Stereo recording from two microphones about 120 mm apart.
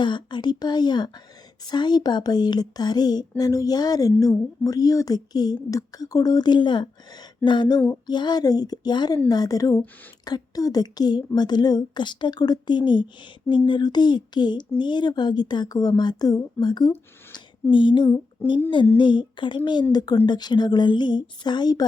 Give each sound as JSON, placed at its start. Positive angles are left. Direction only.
{"t": 0.0, "sound": "a woman's voice", "side_deg": 40}
{"t": 18.4, "sound": "a sound", "side_deg": 20}
{"t": 18.9, "sound": "a woman's voice", "side_deg": 40}